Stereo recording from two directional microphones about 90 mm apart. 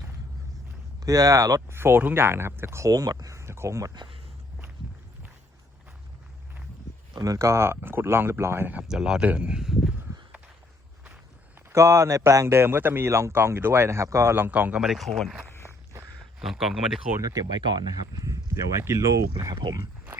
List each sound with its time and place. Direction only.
1.0 s speech: 40° right (ahead or behind)
1.7 s a man's voice: 25° right (ahead or behind)
2.9 s speech: 45° right (ahead or behind)
7.2 s a man's voice: 35° right (ahead or behind)
8.9 s a man's voice: 10° right (ahead or behind)
11.7 s a man's voice: 30° right (ahead or behind)
14.8 s speech: centre (ahead or behind)
17.2 s speech: 40° right (ahead or behind)